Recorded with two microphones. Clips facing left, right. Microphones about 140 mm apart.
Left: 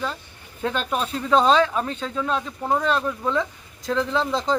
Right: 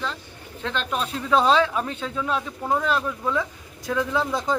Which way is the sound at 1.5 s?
10° right (ahead or behind).